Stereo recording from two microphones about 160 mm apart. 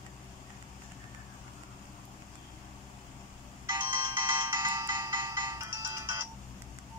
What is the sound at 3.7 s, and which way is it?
Ringtone, 25° right (ahead or behind).